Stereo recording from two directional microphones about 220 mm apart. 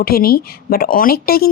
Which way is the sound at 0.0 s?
45° left (ahead or behind).